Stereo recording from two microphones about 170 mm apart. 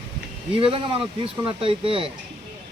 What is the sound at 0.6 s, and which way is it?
Speech, 30° right (ahead or behind).